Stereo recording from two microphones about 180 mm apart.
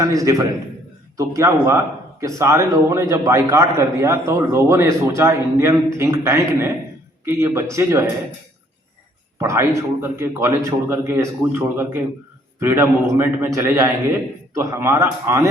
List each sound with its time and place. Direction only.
0.0 s a man's voice: 20° right (ahead or behind)
9.4 s a man's voice: 15° right (ahead or behind)